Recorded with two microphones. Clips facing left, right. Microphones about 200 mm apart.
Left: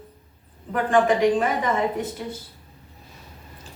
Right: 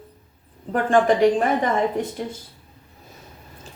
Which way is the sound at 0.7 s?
40° right (ahead or behind).